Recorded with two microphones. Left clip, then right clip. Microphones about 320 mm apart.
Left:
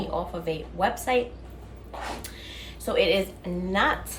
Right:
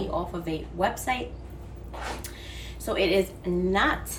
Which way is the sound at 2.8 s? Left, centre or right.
Centre.